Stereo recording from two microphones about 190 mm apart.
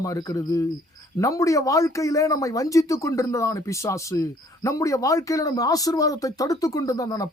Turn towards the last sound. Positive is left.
turn(degrees=20)  # may be behind; listen again after turning